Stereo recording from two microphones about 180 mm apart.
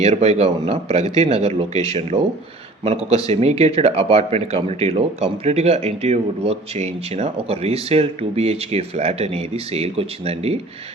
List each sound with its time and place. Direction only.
0.0 s speech: 35° right (ahead or behind)